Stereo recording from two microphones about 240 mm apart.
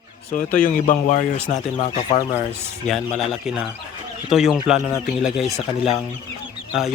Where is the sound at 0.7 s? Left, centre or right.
Left.